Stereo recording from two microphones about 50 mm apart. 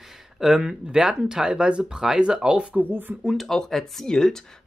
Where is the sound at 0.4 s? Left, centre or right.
Centre.